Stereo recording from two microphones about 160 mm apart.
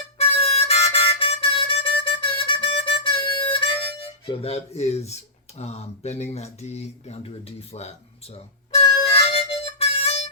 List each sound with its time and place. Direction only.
0.2 s harmonica: 40° left (ahead or behind)
4.3 s speech: 40° left (ahead or behind)
8.7 s harmonica: 35° left (ahead or behind)